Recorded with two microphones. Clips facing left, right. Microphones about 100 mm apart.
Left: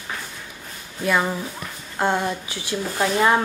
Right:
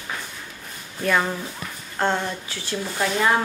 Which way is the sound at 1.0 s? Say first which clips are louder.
Left 1 dB; 5° left (ahead or behind).